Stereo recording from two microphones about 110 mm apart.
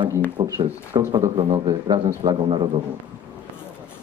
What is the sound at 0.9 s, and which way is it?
Speech, 25° right (ahead or behind).